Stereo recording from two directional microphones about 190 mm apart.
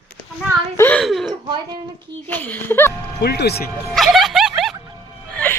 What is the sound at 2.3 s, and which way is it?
Speech, 10° left (ahead or behind).